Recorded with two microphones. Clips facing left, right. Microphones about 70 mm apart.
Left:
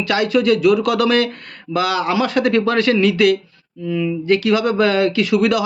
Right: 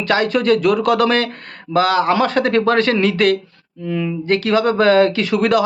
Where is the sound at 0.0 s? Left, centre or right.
Right.